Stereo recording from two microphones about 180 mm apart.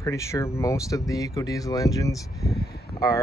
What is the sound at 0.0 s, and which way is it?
Speech, 15° left (ahead or behind).